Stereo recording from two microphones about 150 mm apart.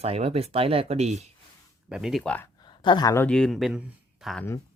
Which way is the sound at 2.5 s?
30° left (ahead or behind).